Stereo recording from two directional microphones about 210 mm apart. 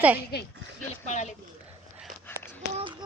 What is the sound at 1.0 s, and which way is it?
Speech, 35° left (ahead or behind).